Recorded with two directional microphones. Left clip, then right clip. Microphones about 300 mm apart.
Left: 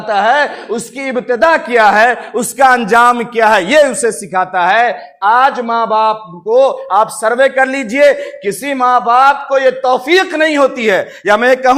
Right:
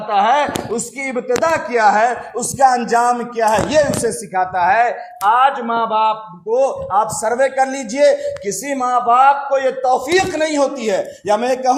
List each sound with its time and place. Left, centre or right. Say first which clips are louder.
0.1 s speech: left 3 dB; left